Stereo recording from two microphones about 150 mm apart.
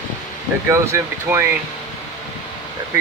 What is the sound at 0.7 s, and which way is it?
Speech, 15° right (ahead or behind).